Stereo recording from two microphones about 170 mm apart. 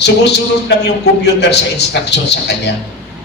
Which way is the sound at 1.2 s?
85° left.